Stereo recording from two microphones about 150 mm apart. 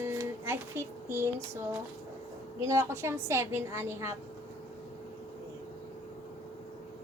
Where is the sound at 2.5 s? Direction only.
20° right (ahead or behind).